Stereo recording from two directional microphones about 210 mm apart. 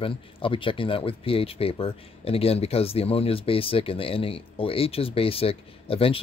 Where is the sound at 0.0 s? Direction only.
25° left (ahead or behind).